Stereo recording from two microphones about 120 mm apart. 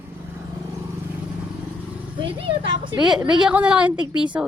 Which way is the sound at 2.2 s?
45° right (ahead or behind).